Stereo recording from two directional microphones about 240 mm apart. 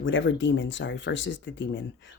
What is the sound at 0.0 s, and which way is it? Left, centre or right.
Speech, left.